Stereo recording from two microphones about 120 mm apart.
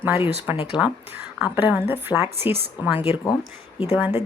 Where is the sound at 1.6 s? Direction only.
15° right (ahead or behind).